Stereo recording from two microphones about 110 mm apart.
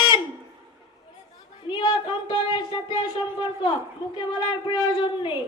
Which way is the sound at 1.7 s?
45° left (ahead or behind).